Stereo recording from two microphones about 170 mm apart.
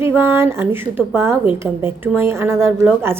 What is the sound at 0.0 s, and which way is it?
A woman's voice, 10° right (ahead or behind).